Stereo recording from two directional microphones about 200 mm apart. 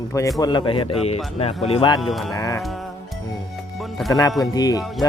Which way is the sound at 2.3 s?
15° left (ahead or behind).